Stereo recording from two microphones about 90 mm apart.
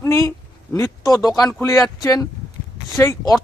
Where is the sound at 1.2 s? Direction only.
45° left (ahead or behind).